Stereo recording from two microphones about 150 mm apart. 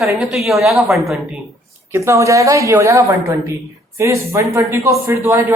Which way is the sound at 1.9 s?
20° right (ahead or behind).